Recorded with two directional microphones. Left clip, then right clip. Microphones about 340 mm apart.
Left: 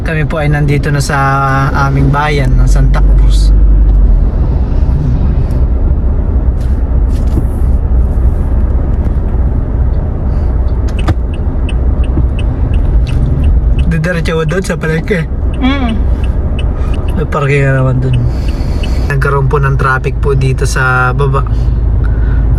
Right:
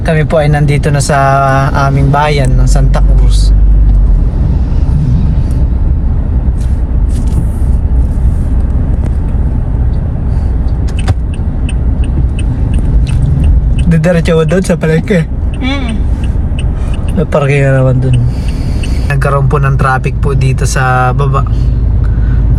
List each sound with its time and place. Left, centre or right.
0.0 s speech: centre
13.8 s speech: centre
15.6 s speech: centre
17.2 s speech: centre